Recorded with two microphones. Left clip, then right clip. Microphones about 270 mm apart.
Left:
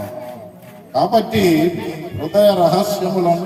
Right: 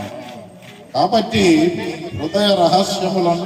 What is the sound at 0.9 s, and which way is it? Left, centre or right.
A man's voice, left.